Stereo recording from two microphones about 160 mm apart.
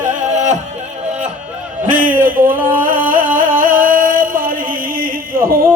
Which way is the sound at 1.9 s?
55° right (ahead or behind).